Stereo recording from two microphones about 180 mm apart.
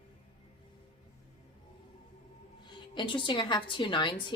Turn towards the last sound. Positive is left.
turn(degrees=25)  # may be behind; listen again after turning